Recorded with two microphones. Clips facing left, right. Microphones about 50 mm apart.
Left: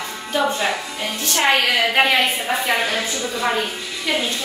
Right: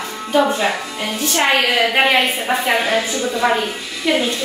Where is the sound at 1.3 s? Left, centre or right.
Centre.